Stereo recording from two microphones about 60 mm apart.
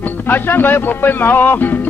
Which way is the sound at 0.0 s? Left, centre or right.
Left.